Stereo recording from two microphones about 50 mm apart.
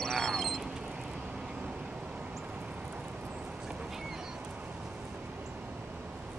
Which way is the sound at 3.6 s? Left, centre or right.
Centre.